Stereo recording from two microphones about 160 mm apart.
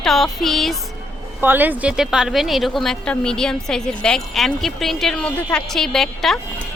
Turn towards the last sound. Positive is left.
turn(degrees=0)  # may be behind; listen again after turning